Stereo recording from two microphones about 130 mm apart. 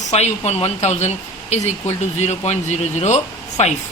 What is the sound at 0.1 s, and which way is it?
Speech, 55° left (ahead or behind).